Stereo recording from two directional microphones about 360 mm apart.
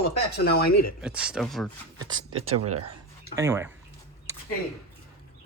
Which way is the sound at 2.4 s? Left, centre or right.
Right.